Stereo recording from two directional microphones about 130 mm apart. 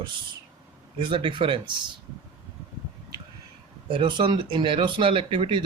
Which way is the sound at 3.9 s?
40° right (ahead or behind).